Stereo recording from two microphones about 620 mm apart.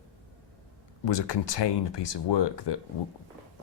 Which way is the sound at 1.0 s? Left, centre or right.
Left.